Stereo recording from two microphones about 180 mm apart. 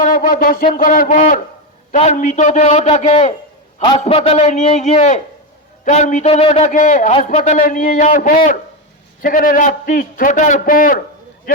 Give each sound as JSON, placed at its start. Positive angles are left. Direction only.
{"t": 0.0, "sound": "a man's voice", "side_deg": 50}
{"t": 7.6, "sound": "a man's voice", "side_deg": 50}